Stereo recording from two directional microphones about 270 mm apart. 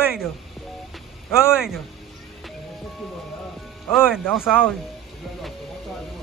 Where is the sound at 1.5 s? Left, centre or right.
Centre.